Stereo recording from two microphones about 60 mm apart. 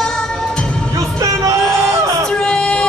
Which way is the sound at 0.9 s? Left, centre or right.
Right.